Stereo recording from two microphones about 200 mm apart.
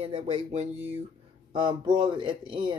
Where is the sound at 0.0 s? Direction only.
30° right (ahead or behind).